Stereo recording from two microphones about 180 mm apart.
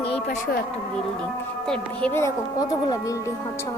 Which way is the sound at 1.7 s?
10° left (ahead or behind).